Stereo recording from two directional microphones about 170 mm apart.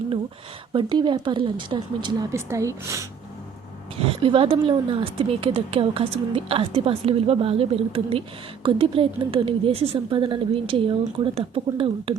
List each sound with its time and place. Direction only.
0.7 s speech: 25° right (ahead or behind)
2.3 s a woman's voice: 15° right (ahead or behind)
4.1 s speech: 30° right (ahead or behind)